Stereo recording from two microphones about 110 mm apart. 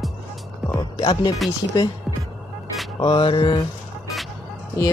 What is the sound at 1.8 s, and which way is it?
Speech, 35° left (ahead or behind).